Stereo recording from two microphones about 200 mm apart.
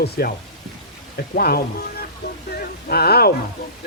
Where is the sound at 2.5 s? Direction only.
50° left (ahead or behind).